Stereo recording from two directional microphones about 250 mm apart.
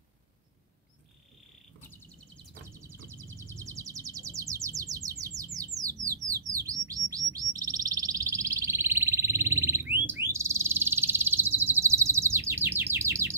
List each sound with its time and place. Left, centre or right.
3.3 s bird: centre